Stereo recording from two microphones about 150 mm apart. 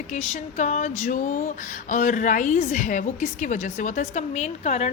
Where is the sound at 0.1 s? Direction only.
55° left (ahead or behind).